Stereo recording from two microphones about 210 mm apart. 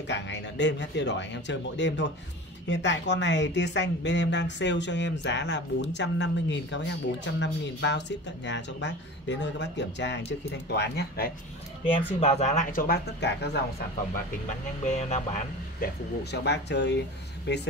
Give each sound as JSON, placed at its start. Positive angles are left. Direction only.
{"t": 0.1, "sound": "speech", "side_deg": 55}
{"t": 12.2, "sound": "speech", "side_deg": 30}
{"t": 14.9, "sound": "speech", "side_deg": 35}
{"t": 15.8, "sound": "speech", "side_deg": 55}